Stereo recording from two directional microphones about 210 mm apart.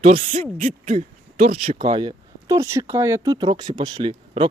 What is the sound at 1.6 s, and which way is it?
Speech, 30° right (ahead or behind).